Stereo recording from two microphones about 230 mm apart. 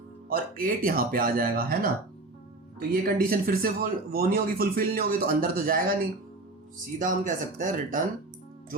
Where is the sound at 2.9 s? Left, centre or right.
Right.